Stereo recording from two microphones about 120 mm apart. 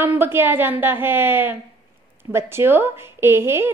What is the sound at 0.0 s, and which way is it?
A woman's voice, 20° right (ahead or behind).